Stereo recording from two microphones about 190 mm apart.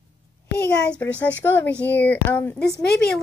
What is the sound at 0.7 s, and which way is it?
A woman's voice, 5° left (ahead or behind).